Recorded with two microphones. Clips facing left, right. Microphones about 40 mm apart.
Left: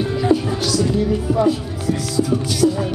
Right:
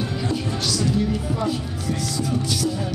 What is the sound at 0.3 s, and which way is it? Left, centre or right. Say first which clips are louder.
Music: left 12 dB; centre.